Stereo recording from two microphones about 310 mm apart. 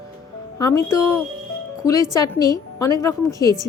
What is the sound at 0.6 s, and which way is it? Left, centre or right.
Speech, centre.